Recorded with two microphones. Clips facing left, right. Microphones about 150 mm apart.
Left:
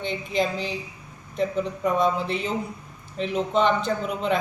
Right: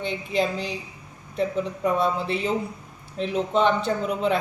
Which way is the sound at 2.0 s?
5° right (ahead or behind).